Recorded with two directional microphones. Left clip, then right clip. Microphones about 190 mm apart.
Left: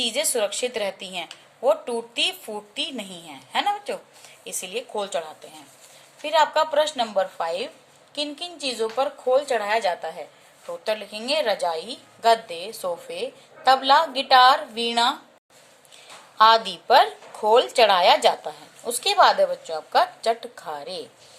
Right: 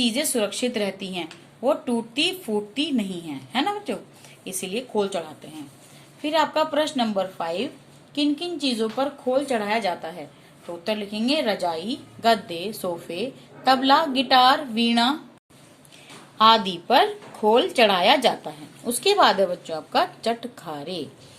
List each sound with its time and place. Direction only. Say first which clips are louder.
0.0 s a woman's voice: even; 25° left (ahead or behind)
16.4 s a woman's voice: left 1 dB; 20° left (ahead or behind)